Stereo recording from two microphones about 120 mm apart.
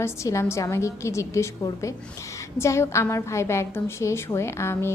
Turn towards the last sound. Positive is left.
turn(degrees=20)  # may be behind; listen again after turning